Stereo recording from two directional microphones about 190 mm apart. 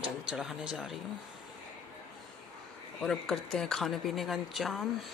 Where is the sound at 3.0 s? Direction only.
Centre (ahead or behind).